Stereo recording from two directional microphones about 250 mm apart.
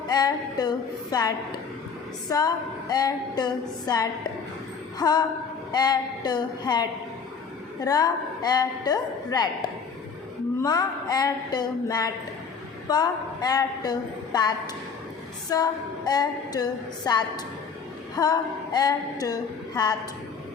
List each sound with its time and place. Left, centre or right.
0.1 s a woman's voice: centre